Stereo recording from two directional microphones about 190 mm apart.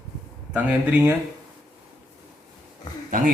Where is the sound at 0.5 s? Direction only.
10° right (ahead or behind).